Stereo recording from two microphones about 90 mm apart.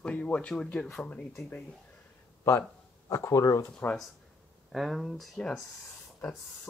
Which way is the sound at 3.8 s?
25° left (ahead or behind).